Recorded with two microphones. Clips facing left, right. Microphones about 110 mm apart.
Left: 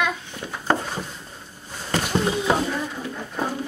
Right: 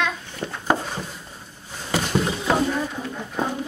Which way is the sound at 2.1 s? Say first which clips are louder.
Left 1 dB; centre (ahead or behind).